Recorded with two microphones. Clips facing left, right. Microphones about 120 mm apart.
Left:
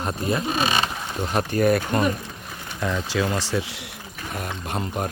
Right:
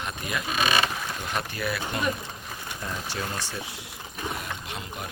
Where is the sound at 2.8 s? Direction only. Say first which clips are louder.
Left 9 dB; 90° left.